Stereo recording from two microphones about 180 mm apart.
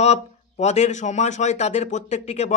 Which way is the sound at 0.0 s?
40° left (ahead or behind).